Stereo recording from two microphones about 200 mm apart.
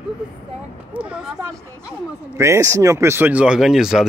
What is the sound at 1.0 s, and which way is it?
Speech, 5° right (ahead or behind).